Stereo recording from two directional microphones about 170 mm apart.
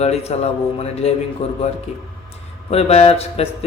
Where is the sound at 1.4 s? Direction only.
35° left (ahead or behind).